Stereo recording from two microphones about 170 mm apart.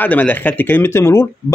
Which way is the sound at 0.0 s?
10° left (ahead or behind).